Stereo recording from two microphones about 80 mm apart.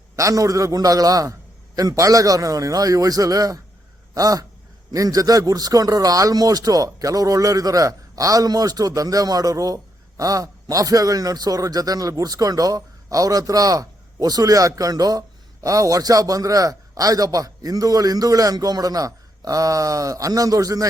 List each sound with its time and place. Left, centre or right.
0.2 s a man's voice: right